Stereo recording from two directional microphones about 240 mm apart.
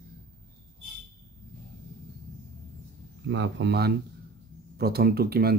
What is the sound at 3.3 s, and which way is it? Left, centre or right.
Speech, right.